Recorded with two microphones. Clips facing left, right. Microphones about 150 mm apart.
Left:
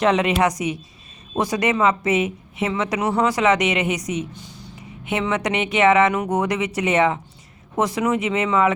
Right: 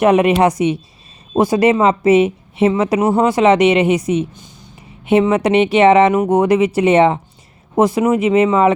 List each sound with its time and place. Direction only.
0.3 s a woman's voice: 25° right (ahead or behind)